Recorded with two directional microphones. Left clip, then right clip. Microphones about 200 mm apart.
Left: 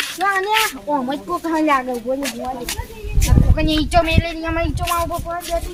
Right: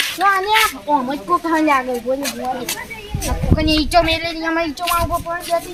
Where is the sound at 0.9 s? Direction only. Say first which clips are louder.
Right 4 dB; 5° right (ahead or behind).